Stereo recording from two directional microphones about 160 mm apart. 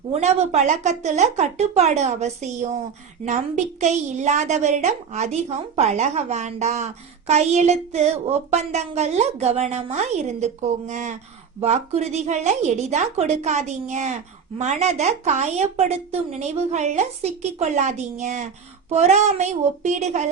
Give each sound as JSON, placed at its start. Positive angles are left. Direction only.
{"t": 0.1, "sound": "a woman's voice", "side_deg": -45}